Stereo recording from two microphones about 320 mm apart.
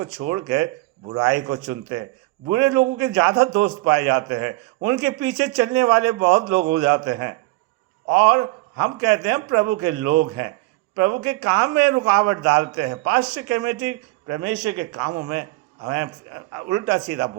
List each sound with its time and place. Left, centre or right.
0.0 s a man's voice: right